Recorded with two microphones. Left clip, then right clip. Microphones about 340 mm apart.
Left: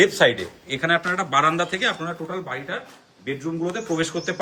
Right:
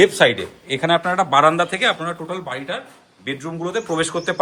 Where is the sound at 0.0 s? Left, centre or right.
Right.